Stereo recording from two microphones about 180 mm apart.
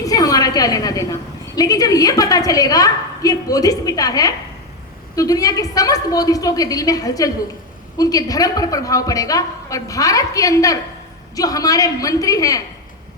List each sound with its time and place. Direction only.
0.0 s a woman's voice: 20° left (ahead or behind)